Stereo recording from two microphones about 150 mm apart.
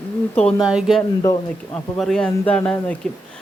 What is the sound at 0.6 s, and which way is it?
Speech, 5° right (ahead or behind).